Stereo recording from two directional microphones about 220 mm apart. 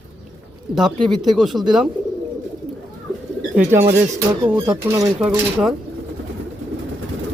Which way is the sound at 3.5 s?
10° right (ahead or behind).